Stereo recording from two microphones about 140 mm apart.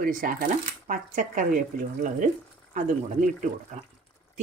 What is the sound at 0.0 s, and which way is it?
Speech, 85° right.